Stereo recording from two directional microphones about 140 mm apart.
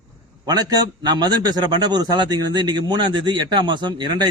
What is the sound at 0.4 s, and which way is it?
A man's voice, 30° right (ahead or behind).